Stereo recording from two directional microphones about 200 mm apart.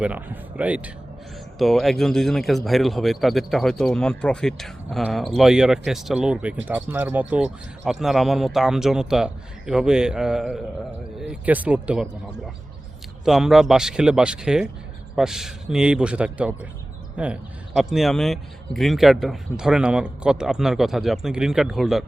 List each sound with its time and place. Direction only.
0.0 s speech: 10° right (ahead or behind)
13.2 s speech: centre (ahead or behind)